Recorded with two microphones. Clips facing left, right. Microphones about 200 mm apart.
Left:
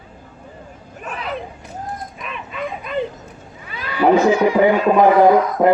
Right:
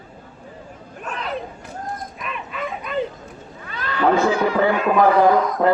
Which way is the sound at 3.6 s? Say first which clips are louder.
Left 3 dB; 10° left (ahead or behind).